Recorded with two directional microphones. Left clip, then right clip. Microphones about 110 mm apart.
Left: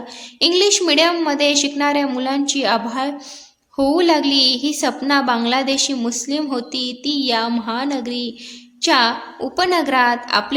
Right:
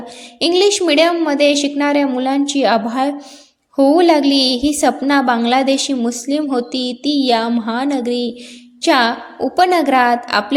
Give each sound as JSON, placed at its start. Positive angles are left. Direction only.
{"t": 0.3, "sound": "a woman's voice", "side_deg": -30}